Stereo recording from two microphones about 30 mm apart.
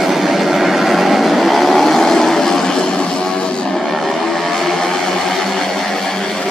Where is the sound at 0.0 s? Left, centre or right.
Centre.